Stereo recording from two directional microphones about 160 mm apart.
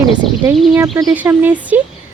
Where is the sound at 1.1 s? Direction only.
10° right (ahead or behind).